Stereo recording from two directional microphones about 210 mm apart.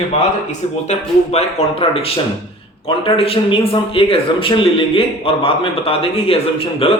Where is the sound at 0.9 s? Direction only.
30° left (ahead or behind).